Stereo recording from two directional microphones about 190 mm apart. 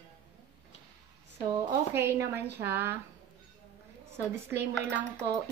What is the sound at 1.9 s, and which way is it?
Speech, 10° right (ahead or behind).